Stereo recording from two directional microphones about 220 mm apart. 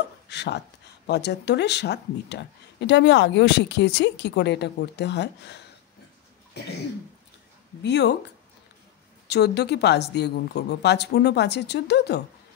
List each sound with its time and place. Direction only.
0.3 s chopping: 50° left (ahead or behind)
1.0 s speech: 50° left (ahead or behind)
7.8 s speech: 50° left (ahead or behind)
9.3 s speech: 50° left (ahead or behind)